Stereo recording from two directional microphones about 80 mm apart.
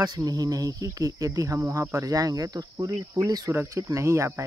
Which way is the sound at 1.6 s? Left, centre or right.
Right.